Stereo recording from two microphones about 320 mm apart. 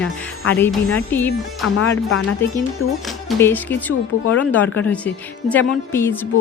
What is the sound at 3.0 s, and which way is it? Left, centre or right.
Speech, centre.